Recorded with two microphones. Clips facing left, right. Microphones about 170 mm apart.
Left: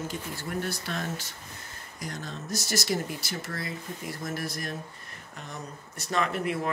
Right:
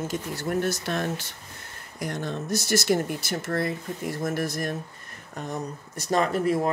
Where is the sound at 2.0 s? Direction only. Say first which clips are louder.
Right 7 dB; 60° right (ahead or behind).